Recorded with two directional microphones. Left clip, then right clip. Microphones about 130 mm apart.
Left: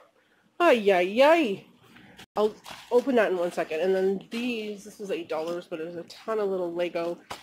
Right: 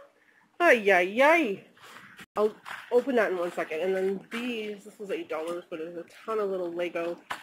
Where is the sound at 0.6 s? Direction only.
35° left (ahead or behind).